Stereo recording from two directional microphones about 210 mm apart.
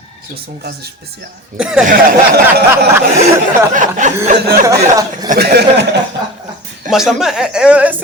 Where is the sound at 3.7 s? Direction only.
35° right (ahead or behind).